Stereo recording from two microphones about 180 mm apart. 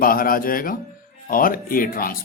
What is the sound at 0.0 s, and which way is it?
Speech, 50° left (ahead or behind).